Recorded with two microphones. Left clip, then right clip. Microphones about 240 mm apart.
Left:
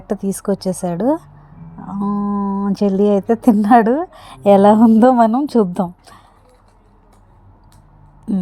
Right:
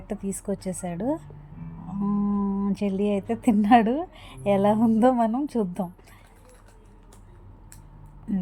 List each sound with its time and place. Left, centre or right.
0.1 s a woman's voice: left